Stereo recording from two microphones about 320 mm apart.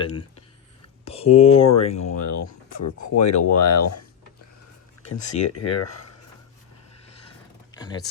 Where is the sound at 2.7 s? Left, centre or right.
Left.